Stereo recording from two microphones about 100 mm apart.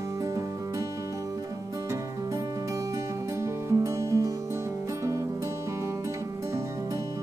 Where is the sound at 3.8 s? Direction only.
30° right (ahead or behind).